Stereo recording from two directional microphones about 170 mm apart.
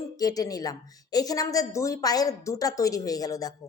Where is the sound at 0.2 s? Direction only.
20° left (ahead or behind).